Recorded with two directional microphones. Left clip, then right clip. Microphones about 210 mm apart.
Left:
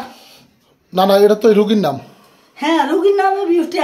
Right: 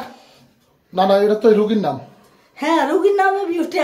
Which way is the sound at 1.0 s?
45° left (ahead or behind).